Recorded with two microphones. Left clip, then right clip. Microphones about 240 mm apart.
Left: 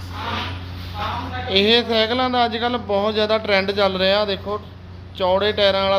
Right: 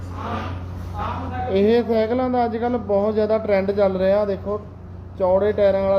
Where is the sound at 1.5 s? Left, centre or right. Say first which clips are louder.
Left 2 dB; left.